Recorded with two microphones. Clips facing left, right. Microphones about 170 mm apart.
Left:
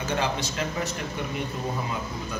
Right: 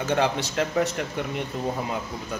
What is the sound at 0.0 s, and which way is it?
Speech, 65° right (ahead or behind).